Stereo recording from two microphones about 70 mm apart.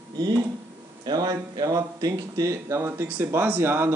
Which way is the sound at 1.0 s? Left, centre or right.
Right.